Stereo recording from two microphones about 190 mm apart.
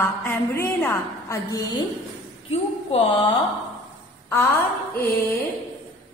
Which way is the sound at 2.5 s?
25° left (ahead or behind).